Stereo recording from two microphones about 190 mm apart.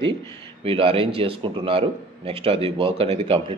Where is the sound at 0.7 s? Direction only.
30° right (ahead or behind).